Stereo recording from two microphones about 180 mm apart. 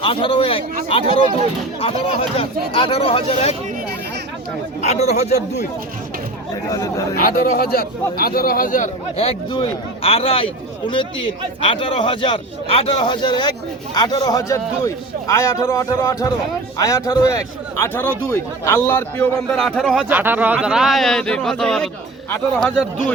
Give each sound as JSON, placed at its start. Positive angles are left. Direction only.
{"t": 0.0, "sound": "a man's voice", "side_deg": 30}
{"t": 4.8, "sound": "a man's voice", "side_deg": 40}
{"t": 6.7, "sound": "a man's voice", "side_deg": 20}
{"t": 7.2, "sound": "a man's voice", "side_deg": 50}
{"t": 20.1, "sound": "speech", "side_deg": -10}